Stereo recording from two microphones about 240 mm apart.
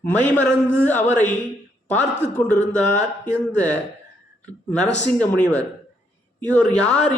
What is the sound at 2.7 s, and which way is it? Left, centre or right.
Speech, centre.